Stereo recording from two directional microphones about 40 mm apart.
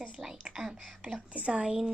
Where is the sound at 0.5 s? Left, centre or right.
Centre.